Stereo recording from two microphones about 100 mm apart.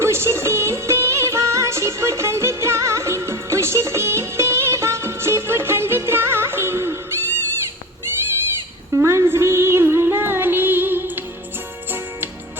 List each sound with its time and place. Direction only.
0.0 s music: 25° right (ahead or behind)
9.0 s music: 25° right (ahead or behind)